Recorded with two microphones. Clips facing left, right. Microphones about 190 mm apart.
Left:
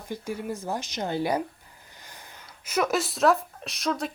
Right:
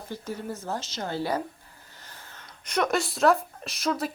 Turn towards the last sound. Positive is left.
turn(degrees=0)  # may be behind; listen again after turning